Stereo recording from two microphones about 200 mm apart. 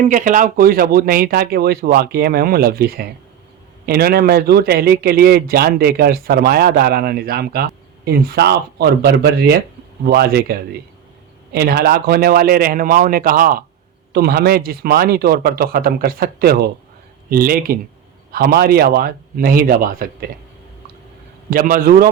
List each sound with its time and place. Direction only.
0.0 s a man's voice: 40° right (ahead or behind)
21.5 s a man's voice: 45° right (ahead or behind)